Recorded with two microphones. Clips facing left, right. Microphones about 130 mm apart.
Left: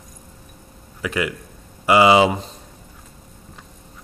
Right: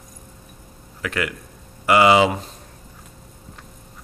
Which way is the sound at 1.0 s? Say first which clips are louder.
Left 2 dB; 10° left (ahead or behind).